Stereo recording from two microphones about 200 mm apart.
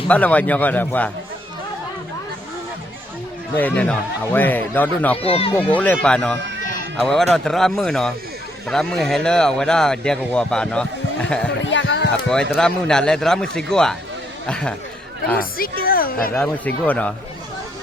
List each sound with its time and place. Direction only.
0.1 s speech: 5° left (ahead or behind)
3.5 s speech: 5° left (ahead or behind)
5.1 s speech: 30° left (ahead or behind)
5.5 s speech: 10° left (ahead or behind)
11.5 s a sound: 65° left (ahead or behind)
12.3 s speech: 5° left (ahead or behind)
15.4 s a woman's voice: 45° left (ahead or behind)
16.3 s speech: 10° left (ahead or behind)